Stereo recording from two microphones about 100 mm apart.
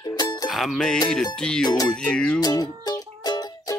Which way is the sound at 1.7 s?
45° left (ahead or behind).